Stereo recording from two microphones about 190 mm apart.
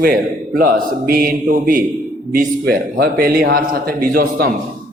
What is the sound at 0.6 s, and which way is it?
A man's voice, 50° right (ahead or behind).